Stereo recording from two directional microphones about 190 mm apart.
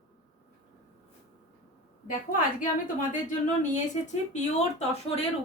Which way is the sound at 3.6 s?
40° left (ahead or behind).